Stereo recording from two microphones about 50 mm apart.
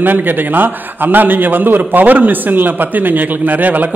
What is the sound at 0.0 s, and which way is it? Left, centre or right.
A man's voice, right.